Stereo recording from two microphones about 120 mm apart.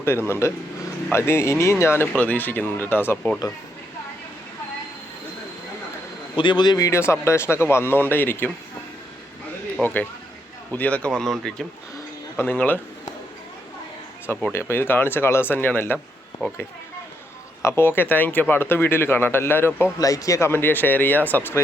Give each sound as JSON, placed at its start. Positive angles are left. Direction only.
{"t": 0.3, "sound": "speech", "side_deg": 25}
{"t": 6.3, "sound": "speech", "side_deg": 40}
{"t": 9.8, "sound": "speech", "side_deg": 15}
{"t": 12.4, "sound": "speech", "side_deg": 15}
{"t": 14.5, "sound": "speech", "side_deg": 20}
{"t": 17.6, "sound": "speech", "side_deg": 20}
{"t": 20.0, "sound": "speech", "side_deg": 30}